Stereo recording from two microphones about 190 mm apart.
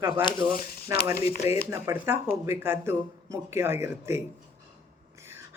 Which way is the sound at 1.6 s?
15° right (ahead or behind).